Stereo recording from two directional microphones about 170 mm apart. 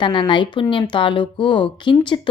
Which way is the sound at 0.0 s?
25° left (ahead or behind).